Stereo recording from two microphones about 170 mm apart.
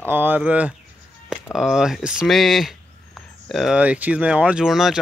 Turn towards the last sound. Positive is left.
turn(degrees=-5)  # may be behind; listen again after turning